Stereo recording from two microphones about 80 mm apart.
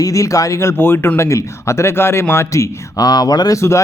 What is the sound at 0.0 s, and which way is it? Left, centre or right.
Speech, left.